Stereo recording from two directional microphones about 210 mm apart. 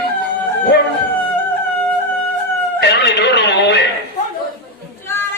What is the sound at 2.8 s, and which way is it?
Music, 55° left (ahead or behind).